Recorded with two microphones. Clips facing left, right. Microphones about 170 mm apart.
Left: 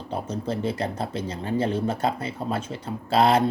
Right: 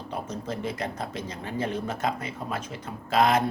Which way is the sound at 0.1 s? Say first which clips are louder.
Left 5 dB; 30° left (ahead or behind).